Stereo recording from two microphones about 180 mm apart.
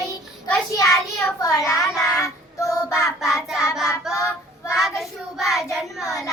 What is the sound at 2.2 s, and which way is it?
Child singing, 15° left (ahead or behind).